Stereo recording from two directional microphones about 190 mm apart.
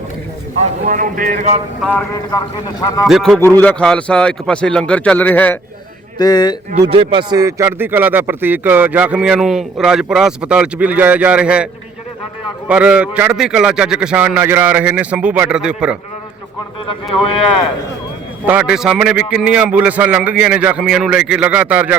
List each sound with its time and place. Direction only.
0.9 s speech: 45° right (ahead or behind)
1.8 s speech: 5° left (ahead or behind)
2.3 s a man's voice: 20° left (ahead or behind)
3.1 s a man's voice: centre (ahead or behind)
6.1 s a man's voice: 20° left (ahead or behind)
6.9 s speech: 25° right (ahead or behind); by 16.0 s 5° right (ahead or behind)
18.4 s speech: 5° right (ahead or behind)